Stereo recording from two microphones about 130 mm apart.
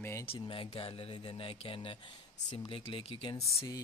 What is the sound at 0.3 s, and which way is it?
Speech, 45° left (ahead or behind).